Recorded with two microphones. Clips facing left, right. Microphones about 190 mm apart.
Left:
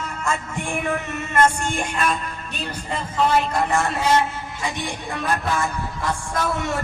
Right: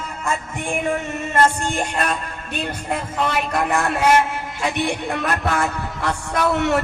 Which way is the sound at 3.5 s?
65° right (ahead or behind).